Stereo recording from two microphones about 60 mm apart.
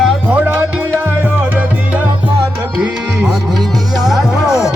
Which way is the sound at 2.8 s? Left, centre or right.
Centre.